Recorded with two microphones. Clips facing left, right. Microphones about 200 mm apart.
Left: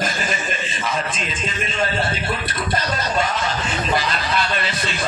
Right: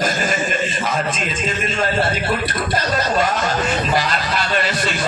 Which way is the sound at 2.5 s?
50° right (ahead or behind).